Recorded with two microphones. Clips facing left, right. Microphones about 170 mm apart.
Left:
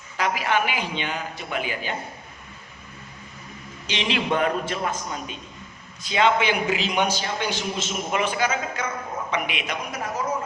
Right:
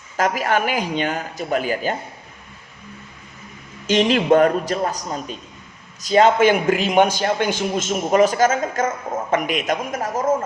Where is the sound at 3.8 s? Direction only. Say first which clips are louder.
Right 10 dB; 45° right (ahead or behind).